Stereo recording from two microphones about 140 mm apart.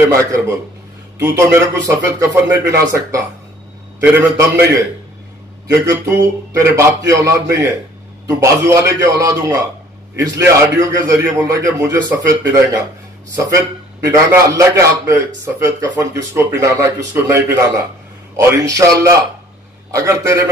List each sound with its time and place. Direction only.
0.1 s a man's voice: 20° right (ahead or behind)
6.6 s a man's voice: 20° right (ahead or behind)